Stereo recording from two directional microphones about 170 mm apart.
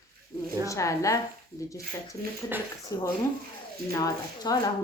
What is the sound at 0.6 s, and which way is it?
Speech, 20° left (ahead or behind).